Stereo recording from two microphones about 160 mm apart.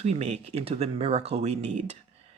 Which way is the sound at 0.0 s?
40° right (ahead or behind).